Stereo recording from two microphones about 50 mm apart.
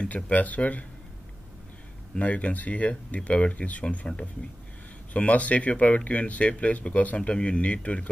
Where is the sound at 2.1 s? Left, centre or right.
Left.